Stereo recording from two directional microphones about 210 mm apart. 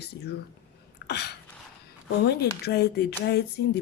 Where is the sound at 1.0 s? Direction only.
55° left (ahead or behind).